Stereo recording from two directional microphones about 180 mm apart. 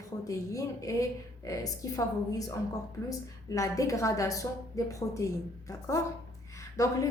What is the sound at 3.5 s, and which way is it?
A woman's voice, 20° left (ahead or behind).